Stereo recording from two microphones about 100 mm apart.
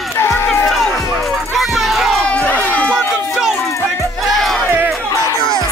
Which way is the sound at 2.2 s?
15° left (ahead or behind).